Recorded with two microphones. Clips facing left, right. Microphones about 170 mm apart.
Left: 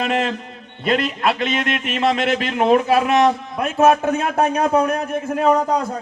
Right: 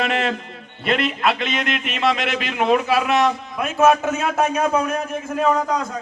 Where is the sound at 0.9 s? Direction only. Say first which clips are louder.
Left 1 dB; 40° left (ahead or behind).